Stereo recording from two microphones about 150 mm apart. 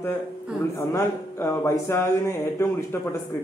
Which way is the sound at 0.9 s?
15° left (ahead or behind).